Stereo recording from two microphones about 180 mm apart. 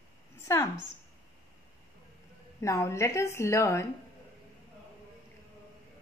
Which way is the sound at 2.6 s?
15° left (ahead or behind).